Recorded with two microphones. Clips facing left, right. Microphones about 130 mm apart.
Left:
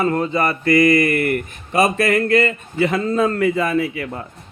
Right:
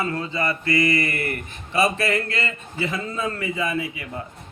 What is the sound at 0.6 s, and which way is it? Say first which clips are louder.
Mantra: left 8 dB; 25° right (ahead or behind).